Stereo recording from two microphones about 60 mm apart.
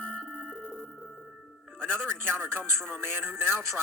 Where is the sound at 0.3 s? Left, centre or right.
Centre.